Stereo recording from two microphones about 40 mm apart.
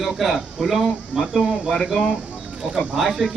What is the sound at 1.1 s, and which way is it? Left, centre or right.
Speech, centre.